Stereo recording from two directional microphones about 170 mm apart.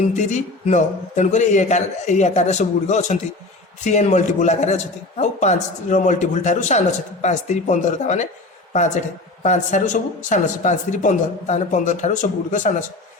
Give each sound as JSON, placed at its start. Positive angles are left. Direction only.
{"t": 0.1, "sound": "a man's voice", "side_deg": 45}